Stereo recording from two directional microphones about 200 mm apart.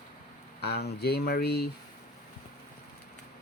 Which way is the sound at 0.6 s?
55° left (ahead or behind).